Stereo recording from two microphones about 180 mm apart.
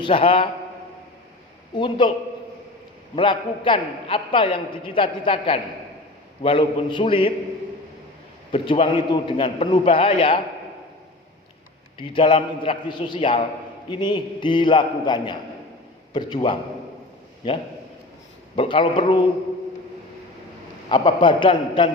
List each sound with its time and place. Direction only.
0.0 s a man's voice: 30° left (ahead or behind)
1.7 s a man's voice: 25° left (ahead or behind)
3.2 s a man's voice: 30° left (ahead or behind)
8.5 s a man's voice: 30° left (ahead or behind)
11.9 s a man's voice: 30° left (ahead or behind)
18.5 s a man's voice: 30° left (ahead or behind)
20.9 s a man's voice: 25° left (ahead or behind)